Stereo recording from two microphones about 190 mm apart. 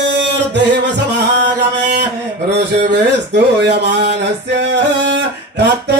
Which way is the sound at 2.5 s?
65° right (ahead or behind).